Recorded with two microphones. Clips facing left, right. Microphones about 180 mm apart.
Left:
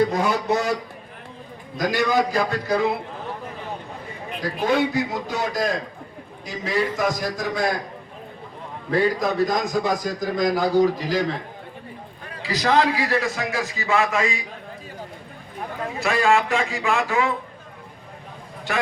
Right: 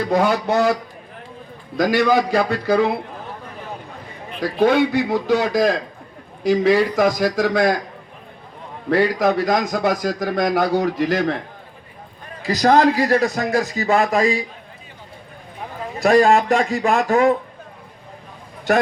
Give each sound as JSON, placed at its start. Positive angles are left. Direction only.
{"t": 0.1, "sound": "a man's voice", "side_deg": -70}
{"t": 1.9, "sound": "a man's voice", "side_deg": -65}
{"t": 4.6, "sound": "a man's voice", "side_deg": -70}
{"t": 6.4, "sound": "a man's voice", "side_deg": -85}
{"t": 8.9, "sound": "a man's voice", "side_deg": -80}
{"t": 12.4, "sound": "a man's voice", "side_deg": -45}
{"t": 16.0, "sound": "a man's voice", "side_deg": -40}
{"t": 18.7, "sound": "a man's voice", "side_deg": -40}